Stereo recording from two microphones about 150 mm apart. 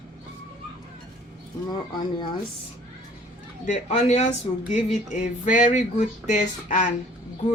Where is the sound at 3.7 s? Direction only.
50° left (ahead or behind).